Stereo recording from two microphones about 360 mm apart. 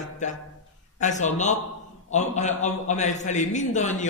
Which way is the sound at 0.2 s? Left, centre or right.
Centre.